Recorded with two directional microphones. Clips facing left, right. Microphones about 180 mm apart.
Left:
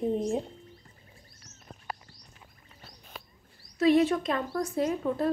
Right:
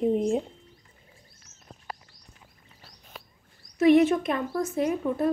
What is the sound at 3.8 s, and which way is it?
A woman's voice, 20° right (ahead or behind).